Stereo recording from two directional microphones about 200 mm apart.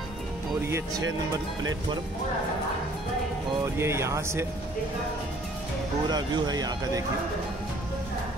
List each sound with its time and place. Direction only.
0.7 s speech: 15° right (ahead or behind)
3.6 s speech: 15° right (ahead or behind)
6.0 s speech: 20° right (ahead or behind)